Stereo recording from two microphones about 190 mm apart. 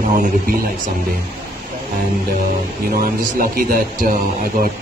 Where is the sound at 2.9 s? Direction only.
50° right (ahead or behind).